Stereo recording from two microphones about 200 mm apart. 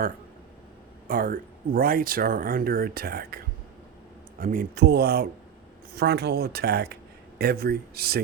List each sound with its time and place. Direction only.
1.0 s speech: 45° right (ahead or behind)